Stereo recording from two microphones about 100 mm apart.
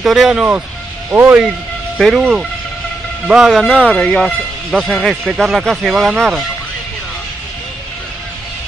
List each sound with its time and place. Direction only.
0.0 s speech: 5° right (ahead or behind); by 1.4 s 20° right (ahead or behind)
2.0 s speech: centre (ahead or behind)
3.3 s speech: 5° right (ahead or behind)
3.7 s speech: 10° left (ahead or behind); by 6.1 s 5° right (ahead or behind)